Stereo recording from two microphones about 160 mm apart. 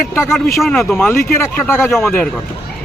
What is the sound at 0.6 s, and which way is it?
Speech, centre (ahead or behind).